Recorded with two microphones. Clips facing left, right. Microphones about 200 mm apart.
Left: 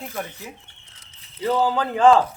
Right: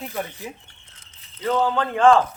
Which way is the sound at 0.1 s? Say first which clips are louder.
Right 2 dB; 15° right (ahead or behind).